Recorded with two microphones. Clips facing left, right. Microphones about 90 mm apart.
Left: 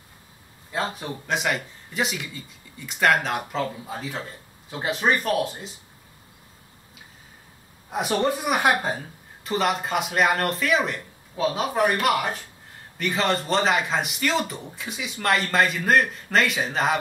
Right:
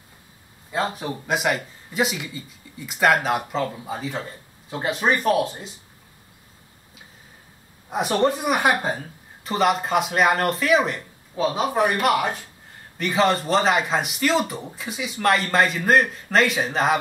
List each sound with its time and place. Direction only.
0.7 s speech: centre (ahead or behind)
7.9 s speech: centre (ahead or behind)